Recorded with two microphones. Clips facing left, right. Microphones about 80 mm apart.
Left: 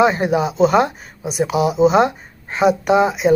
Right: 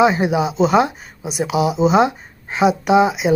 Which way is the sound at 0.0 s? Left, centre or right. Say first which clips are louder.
Even; centre.